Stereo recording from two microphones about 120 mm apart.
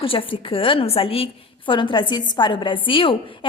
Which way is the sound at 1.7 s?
40° left (ahead or behind).